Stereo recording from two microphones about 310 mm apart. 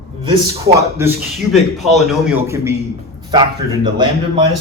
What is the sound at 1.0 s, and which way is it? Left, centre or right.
A man's voice, centre.